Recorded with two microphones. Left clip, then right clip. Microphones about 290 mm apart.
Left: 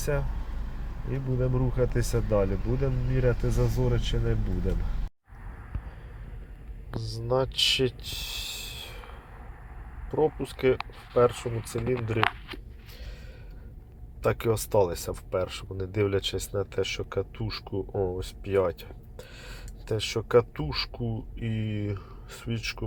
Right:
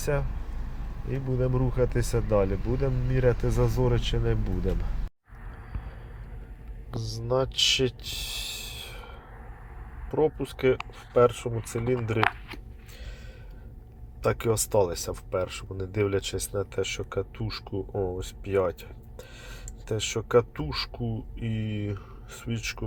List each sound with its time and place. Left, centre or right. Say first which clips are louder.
0.0 s speech: right 1 dB; centre
6.9 s speech: even; centre
14.2 s speech: even; centre